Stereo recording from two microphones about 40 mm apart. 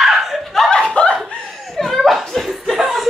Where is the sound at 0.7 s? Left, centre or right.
Left.